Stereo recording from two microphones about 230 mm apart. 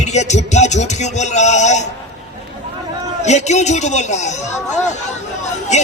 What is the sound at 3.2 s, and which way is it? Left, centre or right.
A man's voice, left.